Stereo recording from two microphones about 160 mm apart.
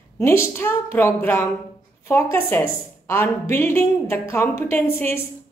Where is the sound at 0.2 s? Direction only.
15° left (ahead or behind).